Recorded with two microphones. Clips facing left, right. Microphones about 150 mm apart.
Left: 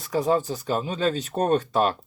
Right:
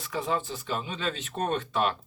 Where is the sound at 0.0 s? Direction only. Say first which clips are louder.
Left 7 dB; 40° left (ahead or behind).